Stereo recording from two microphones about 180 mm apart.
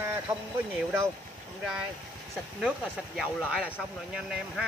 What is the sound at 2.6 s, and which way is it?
Speech, centre (ahead or behind).